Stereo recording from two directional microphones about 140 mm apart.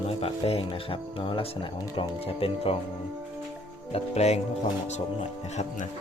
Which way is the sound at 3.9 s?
45° left (ahead or behind).